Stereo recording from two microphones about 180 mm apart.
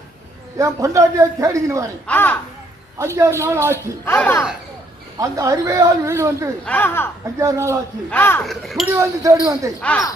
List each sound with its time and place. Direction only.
0.6 s speech: 15° right (ahead or behind)
2.0 s speech: 10° left (ahead or behind)
3.0 s speech: 15° right (ahead or behind)
4.0 s speech: 10° left (ahead or behind)
5.2 s speech: 20° right (ahead or behind)
6.7 s speech: 10° left (ahead or behind)
7.3 s speech: 20° right (ahead or behind)
8.1 s speech: 10° left (ahead or behind)
8.9 s speech: 15° right (ahead or behind)